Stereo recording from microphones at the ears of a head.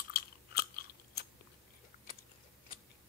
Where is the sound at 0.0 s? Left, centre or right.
Left.